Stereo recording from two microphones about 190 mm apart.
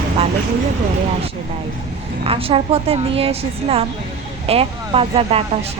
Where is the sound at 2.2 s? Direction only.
30° right (ahead or behind).